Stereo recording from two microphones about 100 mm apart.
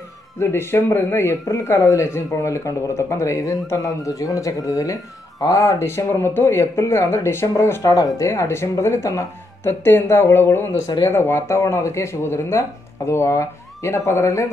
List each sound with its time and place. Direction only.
0.4 s speech: 25° left (ahead or behind)